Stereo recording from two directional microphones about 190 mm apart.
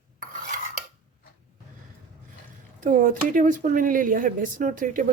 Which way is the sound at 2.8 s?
45° right (ahead or behind).